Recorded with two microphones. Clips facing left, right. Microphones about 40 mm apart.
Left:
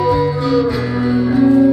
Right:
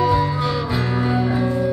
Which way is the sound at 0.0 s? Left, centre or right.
Centre.